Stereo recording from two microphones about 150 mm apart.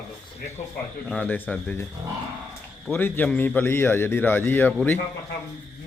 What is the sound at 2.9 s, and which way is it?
A man's voice, 15° left (ahead or behind).